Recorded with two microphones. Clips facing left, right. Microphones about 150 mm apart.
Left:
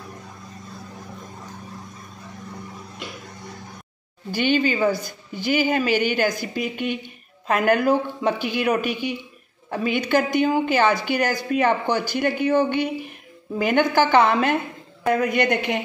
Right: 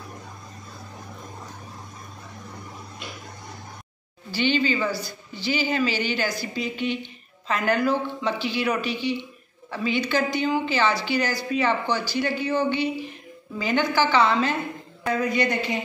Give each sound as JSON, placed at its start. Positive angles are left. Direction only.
{"t": 4.3, "sound": "a woman's voice", "side_deg": 50}